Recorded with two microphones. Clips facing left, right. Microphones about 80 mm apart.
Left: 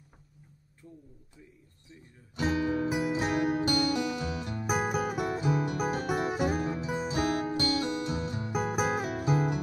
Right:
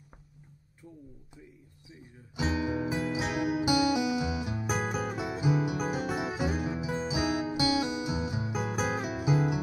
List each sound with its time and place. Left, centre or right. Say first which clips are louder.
1.9 s music: right 2 dB; centre
4.6 s music: left 4 dB; centre
8.5 s music: left 5 dB; centre
9.0 s music: even; centre